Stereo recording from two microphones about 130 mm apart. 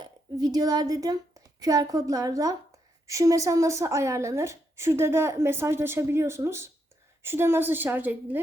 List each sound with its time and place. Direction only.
0.0 s a woman's voice: 30° right (ahead or behind); by 8.4 s 15° right (ahead or behind)